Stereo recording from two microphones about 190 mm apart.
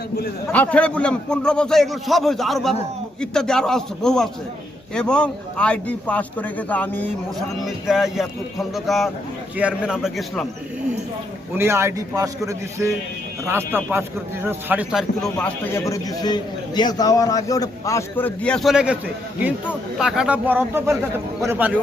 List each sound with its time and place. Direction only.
0.5 s a man's voice: 5° left (ahead or behind)
7.6 s a man's voice: centre (ahead or behind)
11.5 s speech: 15° right (ahead or behind)
15.4 s a man's voice: 10° left (ahead or behind); by 21.8 s 10° right (ahead or behind)